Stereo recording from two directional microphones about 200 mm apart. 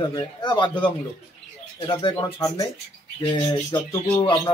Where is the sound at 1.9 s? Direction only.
20° left (ahead or behind).